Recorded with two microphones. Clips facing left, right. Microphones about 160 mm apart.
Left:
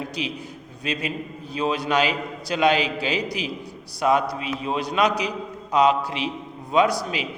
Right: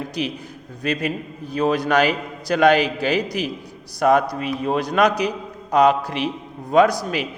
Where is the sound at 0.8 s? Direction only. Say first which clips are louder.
Right 5 dB; 55° right (ahead or behind).